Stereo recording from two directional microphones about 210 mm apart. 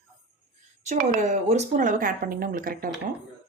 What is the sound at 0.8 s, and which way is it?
Speech, 40° right (ahead or behind).